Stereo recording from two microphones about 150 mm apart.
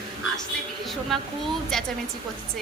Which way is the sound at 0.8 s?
Centre (ahead or behind).